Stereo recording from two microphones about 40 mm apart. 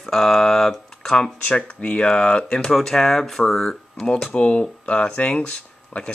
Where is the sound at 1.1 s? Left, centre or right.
Left.